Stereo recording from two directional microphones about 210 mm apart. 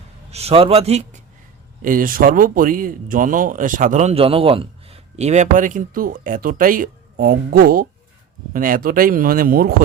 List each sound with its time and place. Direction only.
0.3 s a man's voice: 30° right (ahead or behind)